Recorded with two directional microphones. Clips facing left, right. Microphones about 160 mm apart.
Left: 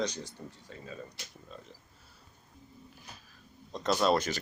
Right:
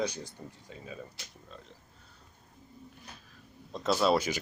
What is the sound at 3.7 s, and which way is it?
Speech, 5° right (ahead or behind).